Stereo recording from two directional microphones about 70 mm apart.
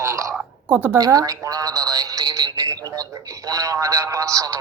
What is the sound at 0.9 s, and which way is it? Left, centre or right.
Speech, right.